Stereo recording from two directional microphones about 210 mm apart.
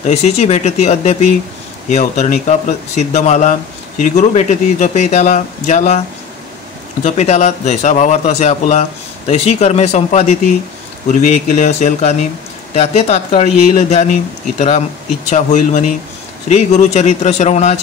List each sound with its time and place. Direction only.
0.0 s speech: 30° left (ahead or behind)
15.2 s speech: 35° left (ahead or behind)